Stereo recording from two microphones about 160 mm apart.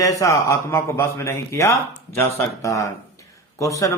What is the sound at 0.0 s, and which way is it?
Speech, 20° left (ahead or behind).